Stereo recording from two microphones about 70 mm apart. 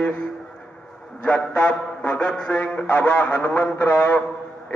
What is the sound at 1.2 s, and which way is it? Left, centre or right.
A man's voice, centre.